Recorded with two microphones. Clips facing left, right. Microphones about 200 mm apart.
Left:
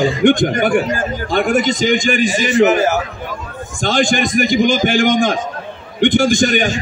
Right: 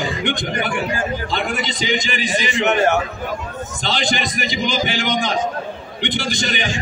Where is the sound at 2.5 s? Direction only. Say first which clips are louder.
Left 4 dB; centre (ahead or behind).